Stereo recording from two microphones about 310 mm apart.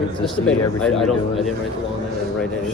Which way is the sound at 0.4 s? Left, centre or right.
Centre.